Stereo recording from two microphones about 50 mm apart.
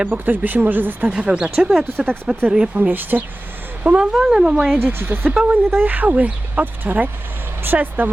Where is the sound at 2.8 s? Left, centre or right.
Right.